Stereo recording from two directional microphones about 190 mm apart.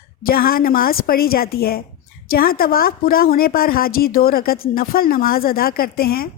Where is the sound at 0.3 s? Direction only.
50° left (ahead or behind).